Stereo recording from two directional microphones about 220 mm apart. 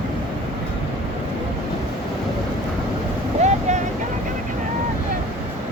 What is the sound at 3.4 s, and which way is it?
Vehicle, 30° right (ahead or behind).